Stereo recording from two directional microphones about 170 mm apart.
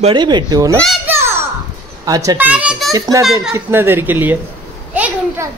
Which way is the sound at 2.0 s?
20° right (ahead or behind).